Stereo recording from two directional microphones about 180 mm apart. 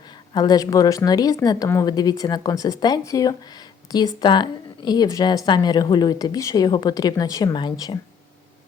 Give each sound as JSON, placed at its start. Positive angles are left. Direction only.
{"t": 0.3, "sound": "a woman's voice", "side_deg": 20}